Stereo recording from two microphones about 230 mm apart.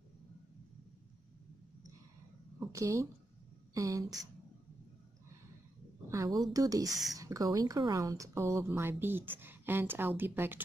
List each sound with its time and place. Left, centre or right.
2.7 s speech: centre
6.0 s a woman's voice: centre